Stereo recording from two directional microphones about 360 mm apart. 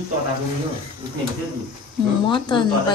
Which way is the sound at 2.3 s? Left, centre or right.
Centre.